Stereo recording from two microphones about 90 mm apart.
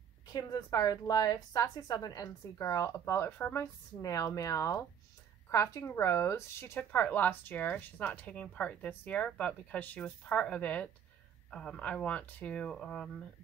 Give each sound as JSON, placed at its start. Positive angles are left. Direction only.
{"t": 0.3, "sound": "a woman's voice", "side_deg": 40}
{"t": 6.8, "sound": "speech", "side_deg": 20}